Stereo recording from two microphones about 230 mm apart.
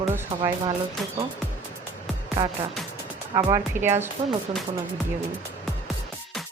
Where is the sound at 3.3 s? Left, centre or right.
Centre.